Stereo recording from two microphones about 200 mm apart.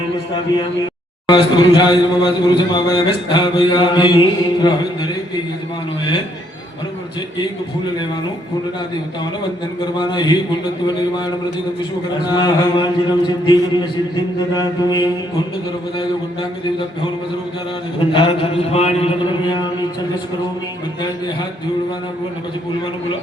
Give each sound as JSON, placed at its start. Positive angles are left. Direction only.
{"t": 1.3, "sound": "speech", "side_deg": 25}
{"t": 10.0, "sound": "speech", "side_deg": 25}
{"t": 12.3, "sound": "speech", "side_deg": 20}
{"t": 18.0, "sound": "speech", "side_deg": 25}